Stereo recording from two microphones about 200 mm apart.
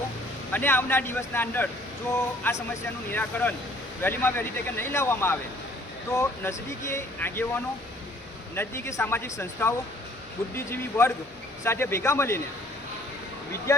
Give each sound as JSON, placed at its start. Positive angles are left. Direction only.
{"t": 0.5, "sound": "speech", "side_deg": 10}
{"t": 13.7, "sound": "speech", "side_deg": 15}